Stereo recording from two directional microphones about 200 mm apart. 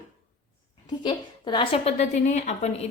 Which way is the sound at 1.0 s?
25° left (ahead or behind).